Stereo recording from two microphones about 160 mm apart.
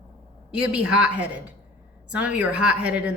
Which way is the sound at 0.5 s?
5° right (ahead or behind).